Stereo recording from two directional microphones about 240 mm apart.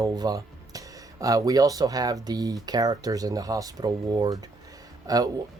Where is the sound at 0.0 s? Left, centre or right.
Centre.